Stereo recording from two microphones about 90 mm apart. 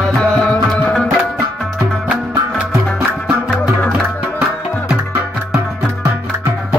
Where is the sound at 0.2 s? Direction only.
10° left (ahead or behind).